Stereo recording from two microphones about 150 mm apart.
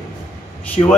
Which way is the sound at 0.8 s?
40° left (ahead or behind).